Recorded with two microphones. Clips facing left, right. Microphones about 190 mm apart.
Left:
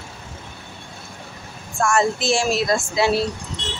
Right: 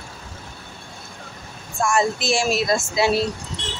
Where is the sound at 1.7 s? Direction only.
15° right (ahead or behind).